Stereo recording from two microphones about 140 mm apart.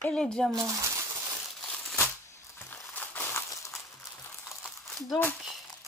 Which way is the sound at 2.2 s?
15° left (ahead or behind).